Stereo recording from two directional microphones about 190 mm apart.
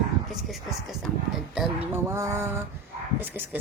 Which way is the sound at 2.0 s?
15° right (ahead or behind).